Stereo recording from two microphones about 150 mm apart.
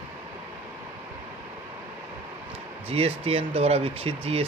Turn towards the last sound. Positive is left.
turn(degrees=-40)  # may be behind; listen again after turning